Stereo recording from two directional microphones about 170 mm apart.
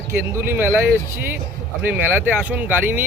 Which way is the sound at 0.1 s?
15° right (ahead or behind).